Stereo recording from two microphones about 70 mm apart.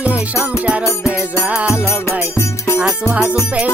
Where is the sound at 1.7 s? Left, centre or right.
Left.